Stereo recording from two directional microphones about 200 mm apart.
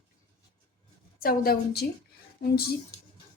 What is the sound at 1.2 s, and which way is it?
A woman's voice, 50° left (ahead or behind).